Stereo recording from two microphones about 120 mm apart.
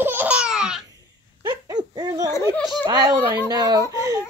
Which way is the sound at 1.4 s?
35° right (ahead or behind).